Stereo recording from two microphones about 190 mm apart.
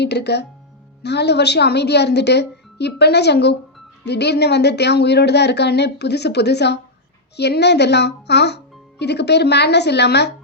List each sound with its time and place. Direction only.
0.0 s a child's voice: 60° left (ahead or behind)